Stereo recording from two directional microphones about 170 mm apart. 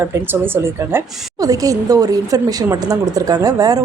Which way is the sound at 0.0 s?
10° right (ahead or behind).